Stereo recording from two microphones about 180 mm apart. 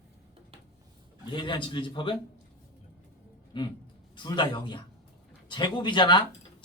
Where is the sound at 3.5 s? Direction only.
30° left (ahead or behind).